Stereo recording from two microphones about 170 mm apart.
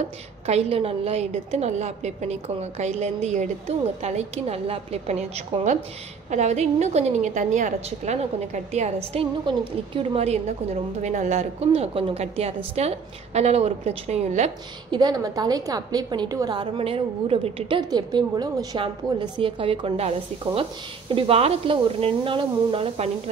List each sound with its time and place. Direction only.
0.5 s a woman's voice: 35° right (ahead or behind)
14.9 s a woman's voice: 25° right (ahead or behind)